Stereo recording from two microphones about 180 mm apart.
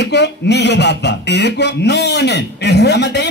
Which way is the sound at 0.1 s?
70° left (ahead or behind).